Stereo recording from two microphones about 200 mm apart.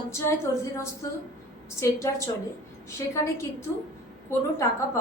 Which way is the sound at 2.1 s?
15° left (ahead or behind).